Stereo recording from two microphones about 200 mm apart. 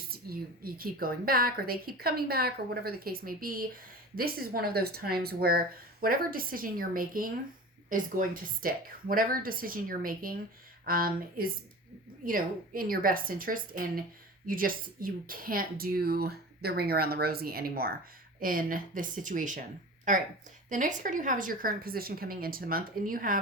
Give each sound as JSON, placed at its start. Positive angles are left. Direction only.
{"t": 0.1, "sound": "a woman's voice", "side_deg": -50}